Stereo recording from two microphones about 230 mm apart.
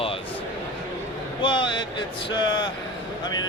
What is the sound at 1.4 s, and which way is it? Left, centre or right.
Speech, left.